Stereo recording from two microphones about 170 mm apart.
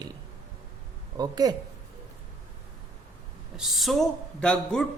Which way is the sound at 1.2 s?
20° right (ahead or behind).